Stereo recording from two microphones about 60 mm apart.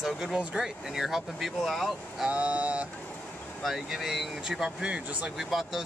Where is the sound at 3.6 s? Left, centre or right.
Centre; by 5.3 s right.